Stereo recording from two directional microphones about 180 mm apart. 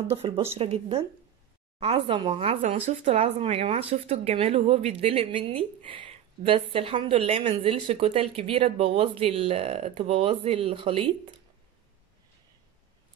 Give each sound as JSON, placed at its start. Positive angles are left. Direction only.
{"t": 0.2, "sound": "speech", "side_deg": -30}